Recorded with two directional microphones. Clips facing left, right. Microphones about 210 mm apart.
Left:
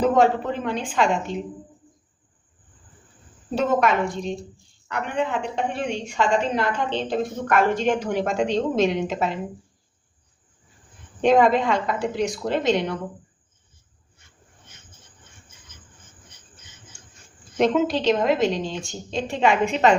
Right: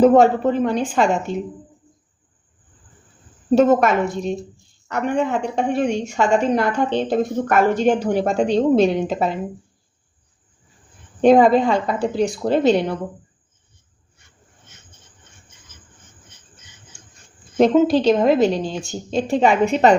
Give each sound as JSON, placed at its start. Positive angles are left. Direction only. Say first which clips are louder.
{"t": 0.0, "sound": "a woman's voice", "louder": "right 6 dB", "side_deg": -40}
{"t": 3.5, "sound": "a woman's voice", "louder": "right 7 dB", "side_deg": -45}
{"t": 4.3, "sound": "speech", "louder": "right 5 dB", "side_deg": -5}
{"t": 4.9, "sound": "a woman's voice", "louder": "right 5 dB", "side_deg": -45}
{"t": 11.2, "sound": "a woman's voice", "louder": "right 5 dB", "side_deg": -35}
{"t": 17.6, "sound": "a woman's voice", "louder": "right 6 dB", "side_deg": -35}
{"t": 18.4, "sound": "speech", "louder": "right 4 dB", "side_deg": -5}
{"t": 18.9, "sound": "a woman's voice", "louder": "right 7 dB", "side_deg": -40}